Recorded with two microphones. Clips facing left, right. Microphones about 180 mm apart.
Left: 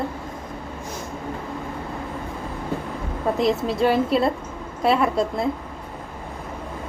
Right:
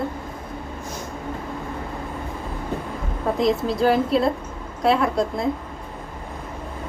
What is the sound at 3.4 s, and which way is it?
A woman's voice, centre (ahead or behind).